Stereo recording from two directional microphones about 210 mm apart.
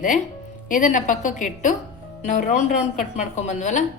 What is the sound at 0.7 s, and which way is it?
A woman's voice, 40° left (ahead or behind).